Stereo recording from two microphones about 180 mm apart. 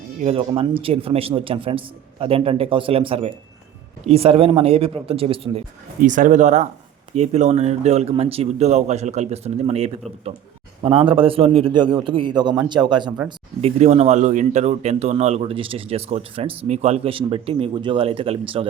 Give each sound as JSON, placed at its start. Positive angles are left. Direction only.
{"t": 0.2, "sound": "speech", "side_deg": -35}
{"t": 6.0, "sound": "a man's voice", "side_deg": -45}